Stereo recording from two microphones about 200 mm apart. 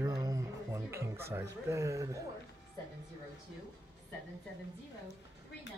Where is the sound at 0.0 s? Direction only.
20° right (ahead or behind).